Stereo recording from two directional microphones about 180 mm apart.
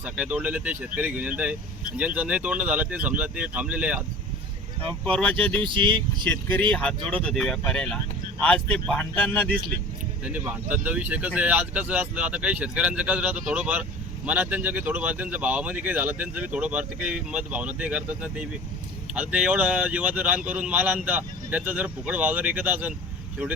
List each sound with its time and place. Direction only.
0.0 s speech: 5° right (ahead or behind)
5.0 s speech: 5° left (ahead or behind)
5.6 s speech: 25° right (ahead or behind)
6.7 s speech: 5° left (ahead or behind)
10.2 s speech: 10° right (ahead or behind)